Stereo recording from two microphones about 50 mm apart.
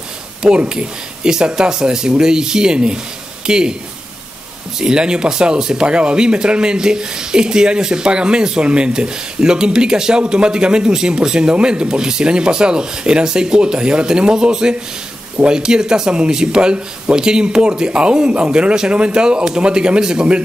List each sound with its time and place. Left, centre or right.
0.4 s speech: centre
4.7 s speech: centre